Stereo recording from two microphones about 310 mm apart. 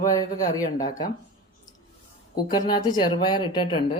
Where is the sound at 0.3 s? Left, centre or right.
Left.